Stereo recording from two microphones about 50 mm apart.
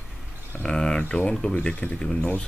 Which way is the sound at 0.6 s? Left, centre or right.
Centre.